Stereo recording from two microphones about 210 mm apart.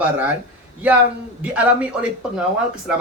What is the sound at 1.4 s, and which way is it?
A man's voice, 5° right (ahead or behind).